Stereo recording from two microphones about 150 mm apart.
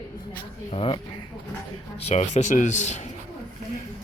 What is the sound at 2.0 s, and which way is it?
Speech, 45° left (ahead or behind).